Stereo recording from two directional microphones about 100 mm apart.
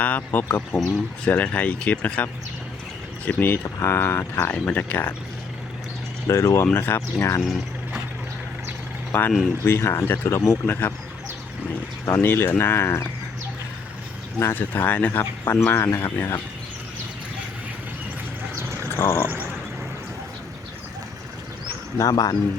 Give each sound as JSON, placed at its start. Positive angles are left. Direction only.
{"t": 0.2, "sound": "speech", "side_deg": 20}
{"t": 6.2, "sound": "speech", "side_deg": 35}
{"t": 9.1, "sound": "speech", "side_deg": 15}
{"t": 10.7, "sound": "speech", "side_deg": 20}
{"t": 12.0, "sound": "speech", "side_deg": 25}
{"t": 14.3, "sound": "speech", "side_deg": 20}
{"t": 18.9, "sound": "speech", "side_deg": 25}
{"t": 21.9, "sound": "speech", "side_deg": 35}